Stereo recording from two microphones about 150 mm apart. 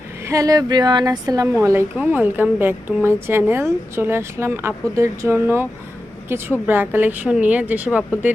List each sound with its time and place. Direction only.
0.3 s speech: 25° right (ahead or behind)
1.6 s a woman's voice: 15° right (ahead or behind)